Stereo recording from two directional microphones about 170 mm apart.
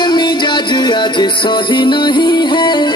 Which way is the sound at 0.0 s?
25° left (ahead or behind).